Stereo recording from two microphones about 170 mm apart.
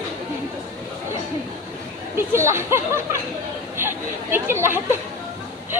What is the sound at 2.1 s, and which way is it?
Speech, 15° right (ahead or behind).